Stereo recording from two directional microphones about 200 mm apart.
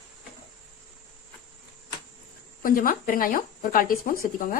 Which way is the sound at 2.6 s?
45° left (ahead or behind).